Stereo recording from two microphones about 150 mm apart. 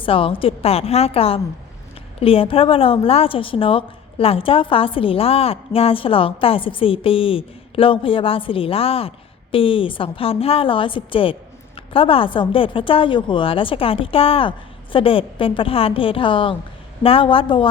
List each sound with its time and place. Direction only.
0.0 s a woman's voice: 35° left (ahead or behind)